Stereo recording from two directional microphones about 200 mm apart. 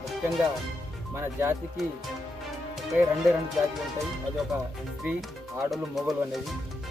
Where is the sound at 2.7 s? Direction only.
Centre (ahead or behind).